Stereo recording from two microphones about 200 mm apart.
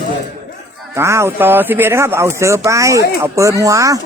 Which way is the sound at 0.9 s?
15° right (ahead or behind).